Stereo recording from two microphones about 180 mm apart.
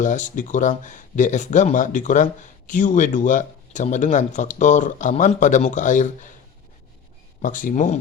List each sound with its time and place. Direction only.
0.0 s speech: 45° left (ahead or behind)
7.4 s speech: 45° left (ahead or behind)